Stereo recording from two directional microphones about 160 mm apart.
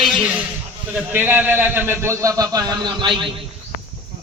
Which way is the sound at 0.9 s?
10° right (ahead or behind).